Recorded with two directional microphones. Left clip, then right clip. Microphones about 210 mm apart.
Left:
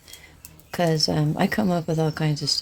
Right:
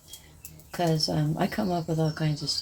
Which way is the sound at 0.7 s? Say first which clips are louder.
Left 5 dB; 50° left (ahead or behind).